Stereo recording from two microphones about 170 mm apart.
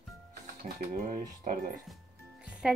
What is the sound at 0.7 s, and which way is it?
Speech, 50° right (ahead or behind).